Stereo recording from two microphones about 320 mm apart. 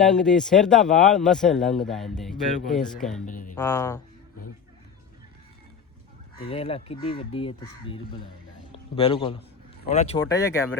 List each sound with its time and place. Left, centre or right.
0.0 s speech: centre
3.2 s speech: left
3.5 s speech: centre
6.4 s speech: centre